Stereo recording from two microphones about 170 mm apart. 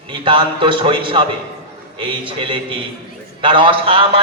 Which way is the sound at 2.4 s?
30° right (ahead or behind).